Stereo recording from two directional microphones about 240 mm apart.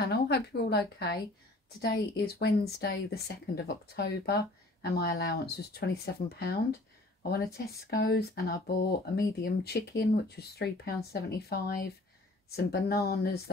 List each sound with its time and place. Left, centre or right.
0.0 s a woman's voice: left